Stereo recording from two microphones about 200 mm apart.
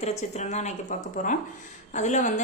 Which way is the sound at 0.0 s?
35° left (ahead or behind).